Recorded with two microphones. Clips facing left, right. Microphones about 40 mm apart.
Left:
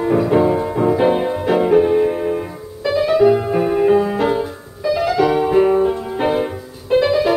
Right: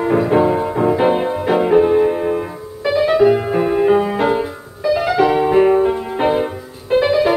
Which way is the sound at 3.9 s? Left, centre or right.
Right.